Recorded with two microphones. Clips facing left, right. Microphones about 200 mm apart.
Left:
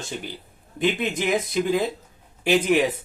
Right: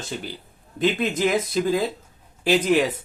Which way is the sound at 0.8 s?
15° left (ahead or behind).